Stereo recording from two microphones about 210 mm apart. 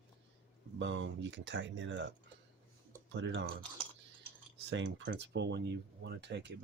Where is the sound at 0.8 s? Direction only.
60° right (ahead or behind).